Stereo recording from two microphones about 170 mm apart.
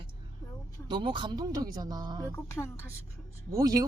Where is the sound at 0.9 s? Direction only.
25° right (ahead or behind).